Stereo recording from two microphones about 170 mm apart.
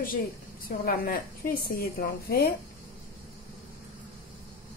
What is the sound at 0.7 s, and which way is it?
A woman's voice, 60° left (ahead or behind).